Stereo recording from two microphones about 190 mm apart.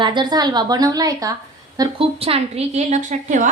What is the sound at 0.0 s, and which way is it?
A woman's voice, 25° right (ahead or behind).